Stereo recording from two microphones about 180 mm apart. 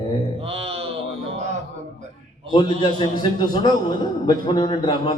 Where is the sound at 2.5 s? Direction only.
25° left (ahead or behind).